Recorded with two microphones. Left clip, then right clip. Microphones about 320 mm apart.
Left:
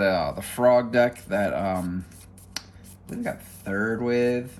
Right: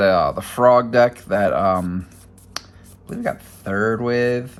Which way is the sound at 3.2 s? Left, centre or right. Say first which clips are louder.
Right 7 dB; right.